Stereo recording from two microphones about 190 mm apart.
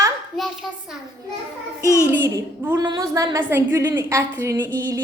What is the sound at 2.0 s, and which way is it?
A woman's voice, 15° right (ahead or behind).